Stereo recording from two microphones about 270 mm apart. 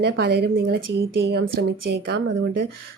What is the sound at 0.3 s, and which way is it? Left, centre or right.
A woman's voice, right.